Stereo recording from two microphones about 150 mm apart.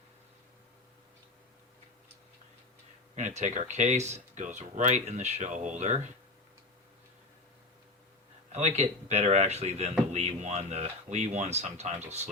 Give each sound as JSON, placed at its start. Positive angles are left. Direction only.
{"t": 3.2, "sound": "speech", "side_deg": -50}
{"t": 8.5, "sound": "speech", "side_deg": -45}